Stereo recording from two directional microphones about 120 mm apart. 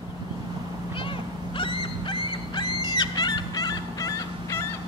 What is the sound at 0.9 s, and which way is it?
Dog, 45° left (ahead or behind).